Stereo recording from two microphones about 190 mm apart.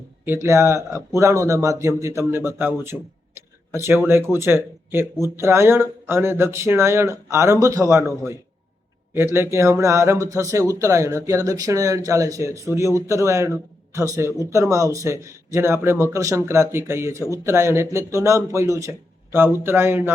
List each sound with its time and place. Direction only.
0.3 s speech: 15° right (ahead or behind)